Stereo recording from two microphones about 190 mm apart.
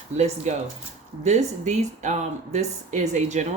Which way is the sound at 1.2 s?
35° right (ahead or behind).